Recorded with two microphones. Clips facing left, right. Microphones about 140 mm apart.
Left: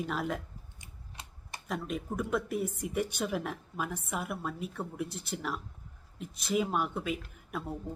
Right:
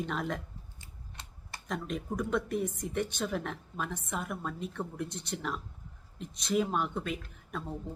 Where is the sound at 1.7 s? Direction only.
5° left (ahead or behind).